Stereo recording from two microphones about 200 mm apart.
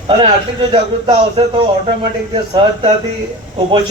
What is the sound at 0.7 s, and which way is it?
A man's voice, 30° right (ahead or behind).